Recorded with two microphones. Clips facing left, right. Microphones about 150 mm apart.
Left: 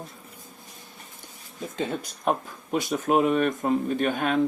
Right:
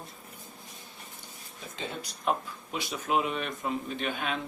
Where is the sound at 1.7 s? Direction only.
45° left (ahead or behind).